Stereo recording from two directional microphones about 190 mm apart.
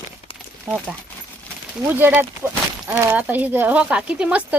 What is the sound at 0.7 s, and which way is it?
Speech, 10° right (ahead or behind).